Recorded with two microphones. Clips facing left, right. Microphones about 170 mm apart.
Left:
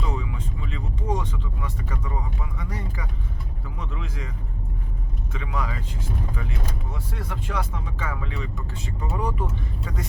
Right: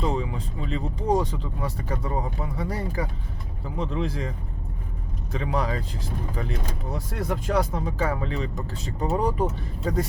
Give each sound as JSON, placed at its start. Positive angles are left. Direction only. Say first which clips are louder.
{"t": 0.0, "sound": "speech", "louder": "right 4 dB", "side_deg": -35}
{"t": 5.3, "sound": "speech", "louder": "right 5 dB", "side_deg": -35}